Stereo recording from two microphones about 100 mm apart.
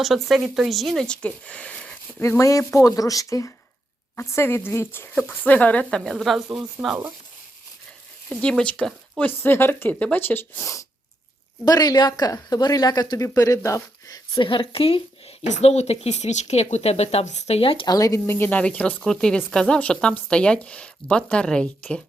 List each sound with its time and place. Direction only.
0.0 s speech: centre (ahead or behind)
2.2 s speech: 30° left (ahead or behind); by 7.0 s centre (ahead or behind)
8.3 s speech: 10° left (ahead or behind); by 10.8 s 30° left (ahead or behind)
11.6 s speech: 40° left (ahead or behind)
14.3 s speech: 60° left (ahead or behind)
15.6 s speech: 90° left; by 17.8 s 65° left (ahead or behind)
17.8 s speech: 35° left (ahead or behind)
18.3 s speech: 20° left (ahead or behind)